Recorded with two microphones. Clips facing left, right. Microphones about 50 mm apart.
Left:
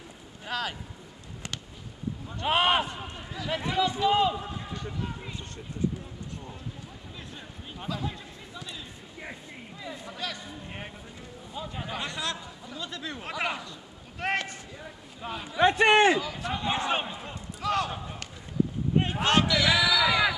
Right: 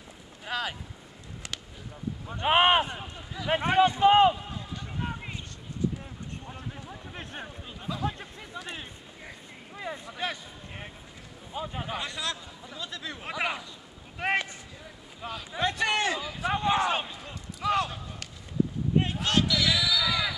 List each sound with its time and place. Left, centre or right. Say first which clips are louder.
0.5 s speech: even; centre
2.2 s speech: right 3 dB; right
3.4 s a man's voice: right 5 dB; right
6.5 s speech: right 2 dB; right
9.9 s a man's voice: right 4 dB; right
10.2 s speech: right 3 dB; right
11.5 s speech: right 2 dB; centre
12.0 s a man's voice: left 1 dB; centre
15.2 s speech: left 6 dB; left
16.2 s speech: even; centre
16.6 s a man's voice: right 2 dB; centre
17.1 s speech: left 3 dB; left
17.6 s basketball bounce: right 1 dB; centre
19.2 s speech: left 5 dB; centre; by 20.3 s left